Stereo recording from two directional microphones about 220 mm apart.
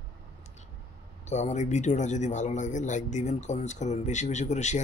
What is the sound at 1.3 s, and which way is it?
A man's voice, 30° left (ahead or behind).